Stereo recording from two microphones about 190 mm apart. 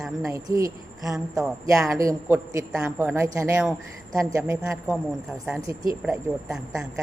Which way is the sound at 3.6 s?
5° right (ahead or behind).